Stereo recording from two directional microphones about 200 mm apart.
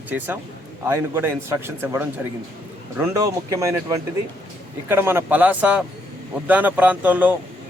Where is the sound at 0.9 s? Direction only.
10° right (ahead or behind).